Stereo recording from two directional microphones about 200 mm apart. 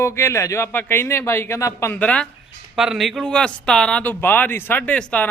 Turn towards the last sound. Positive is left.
turn(degrees=5)  # may be behind; listen again after turning